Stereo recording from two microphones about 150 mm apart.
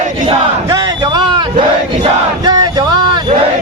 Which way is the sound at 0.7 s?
30° right (ahead or behind).